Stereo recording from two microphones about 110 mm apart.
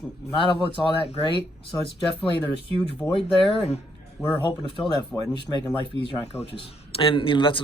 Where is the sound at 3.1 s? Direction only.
55° left (ahead or behind).